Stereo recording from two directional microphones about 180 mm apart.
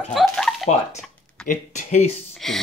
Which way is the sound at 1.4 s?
40° left (ahead or behind).